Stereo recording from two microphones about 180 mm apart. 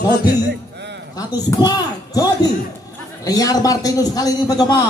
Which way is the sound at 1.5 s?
20° left (ahead or behind).